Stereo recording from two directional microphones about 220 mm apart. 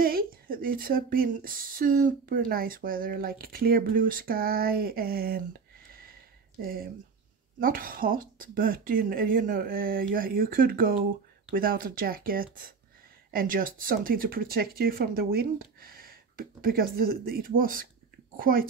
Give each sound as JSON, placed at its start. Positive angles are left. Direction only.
{"t": 0.0, "sound": "speech", "side_deg": -40}
{"t": 6.6, "sound": "a child's voice", "side_deg": -40}